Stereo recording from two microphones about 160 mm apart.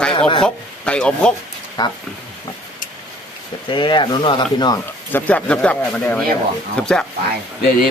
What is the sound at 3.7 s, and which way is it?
Speech, 30° left (ahead or behind).